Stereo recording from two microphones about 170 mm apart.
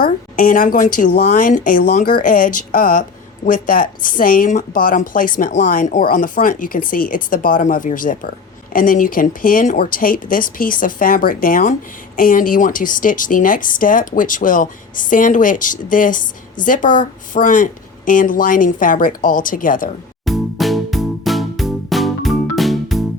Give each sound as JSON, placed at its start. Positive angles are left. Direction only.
{"t": 0.0, "sound": "speech", "side_deg": 55}
{"t": 20.2, "sound": "music", "side_deg": 0}